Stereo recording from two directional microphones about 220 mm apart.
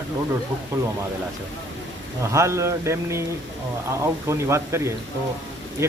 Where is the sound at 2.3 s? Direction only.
15° right (ahead or behind).